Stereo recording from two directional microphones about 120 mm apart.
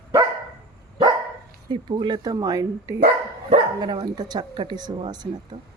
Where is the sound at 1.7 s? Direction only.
40° right (ahead or behind).